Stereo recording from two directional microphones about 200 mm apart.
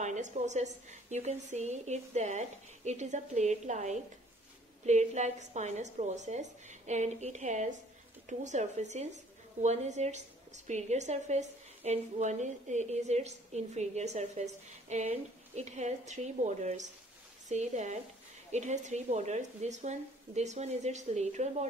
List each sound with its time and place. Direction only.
0.0 s a woman's voice: 35° right (ahead or behind)